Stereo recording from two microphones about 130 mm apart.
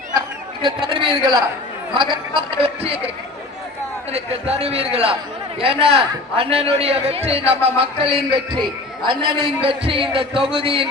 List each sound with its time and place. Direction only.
0.6 s a man's voice: 40° right (ahead or behind)
4.1 s a man's voice: 50° right (ahead or behind)